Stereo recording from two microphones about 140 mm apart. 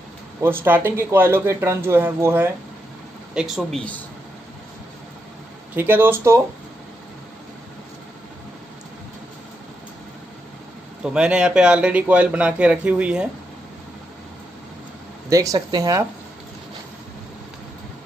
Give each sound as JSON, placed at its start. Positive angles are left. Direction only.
{"t": 0.4, "sound": "speech", "side_deg": -15}
{"t": 3.3, "sound": "speech", "side_deg": 0}
{"t": 5.8, "sound": "speech", "side_deg": -15}
{"t": 11.1, "sound": "speech", "side_deg": -5}
{"t": 15.2, "sound": "speech", "side_deg": -25}